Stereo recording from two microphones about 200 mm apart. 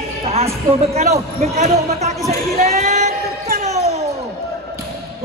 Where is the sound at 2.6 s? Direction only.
35° right (ahead or behind).